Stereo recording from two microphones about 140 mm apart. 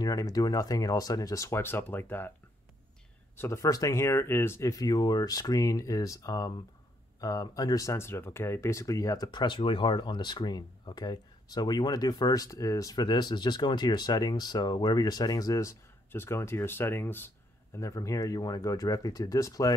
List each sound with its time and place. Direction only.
0.0 s speech: 25° left (ahead or behind)
3.3 s speech: 20° left (ahead or behind)